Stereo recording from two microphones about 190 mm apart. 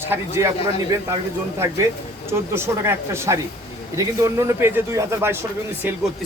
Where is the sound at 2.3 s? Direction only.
15° right (ahead or behind).